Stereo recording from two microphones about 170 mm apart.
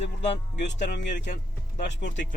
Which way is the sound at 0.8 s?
90° left.